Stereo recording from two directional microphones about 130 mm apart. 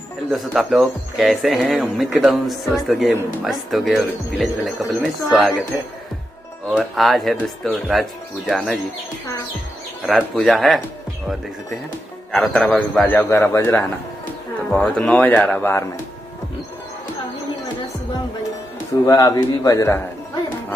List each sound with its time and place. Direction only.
0.3 s speech: centre (ahead or behind)
6.7 s speech: centre (ahead or behind)
10.0 s speech: centre (ahead or behind)
12.3 s speech: 5° left (ahead or behind)
13.0 s speech: 15° left (ahead or behind)
14.7 s speech: 5° left (ahead or behind)
19.0 s a man's voice: 30° left (ahead or behind)